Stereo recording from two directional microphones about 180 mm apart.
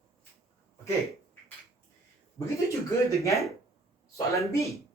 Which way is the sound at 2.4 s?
15° left (ahead or behind).